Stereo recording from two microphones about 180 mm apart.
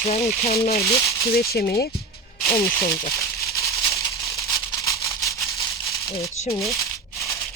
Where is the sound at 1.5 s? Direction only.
60° left (ahead or behind).